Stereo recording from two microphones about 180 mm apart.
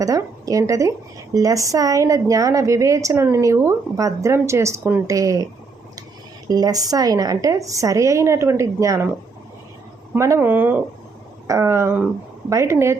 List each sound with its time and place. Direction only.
0.0 s speech: 20° right (ahead or behind)
6.5 s speech: 20° right (ahead or behind)
10.2 s speech: 15° right (ahead or behind)